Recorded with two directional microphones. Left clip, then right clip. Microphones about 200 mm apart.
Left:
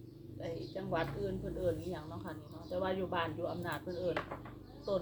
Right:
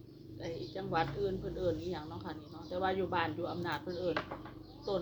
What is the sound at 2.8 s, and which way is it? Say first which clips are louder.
Speech: right 3 dB; 20° right (ahead or behind).